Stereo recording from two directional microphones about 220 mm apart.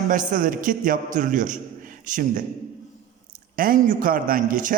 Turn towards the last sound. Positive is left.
turn(degrees=-35)  # may be behind; listen again after turning